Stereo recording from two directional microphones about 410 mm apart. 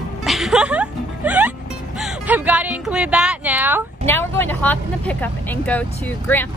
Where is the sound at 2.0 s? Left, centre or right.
Centre.